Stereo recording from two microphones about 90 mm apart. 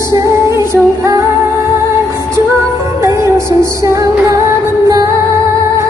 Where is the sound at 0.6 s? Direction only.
40° right (ahead or behind).